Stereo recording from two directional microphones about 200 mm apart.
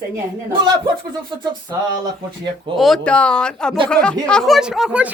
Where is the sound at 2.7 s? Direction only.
Centre (ahead or behind).